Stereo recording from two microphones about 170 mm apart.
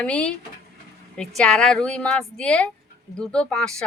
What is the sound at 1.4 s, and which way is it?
Speech, 5° left (ahead or behind).